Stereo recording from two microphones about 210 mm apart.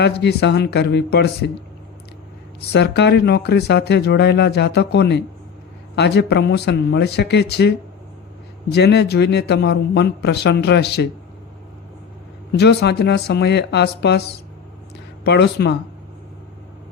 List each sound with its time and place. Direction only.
0.2 s speech: 50° left (ahead or behind)
2.7 s speech: 55° left (ahead or behind)
8.7 s speech: 50° left (ahead or behind)
12.5 s speech: 55° left (ahead or behind)
15.2 s speech: 50° left (ahead or behind)